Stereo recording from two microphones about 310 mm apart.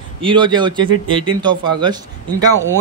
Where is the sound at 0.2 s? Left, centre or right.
Centre.